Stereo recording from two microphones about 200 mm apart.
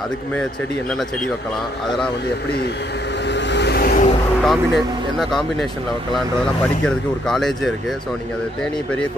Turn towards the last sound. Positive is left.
turn(degrees=0)  # may be behind; listen again after turning